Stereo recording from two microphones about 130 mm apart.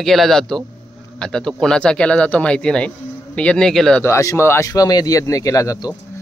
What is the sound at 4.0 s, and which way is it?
Speech, 20° left (ahead or behind).